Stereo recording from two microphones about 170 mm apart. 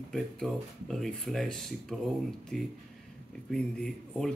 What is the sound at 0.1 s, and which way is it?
Speech, centre (ahead or behind).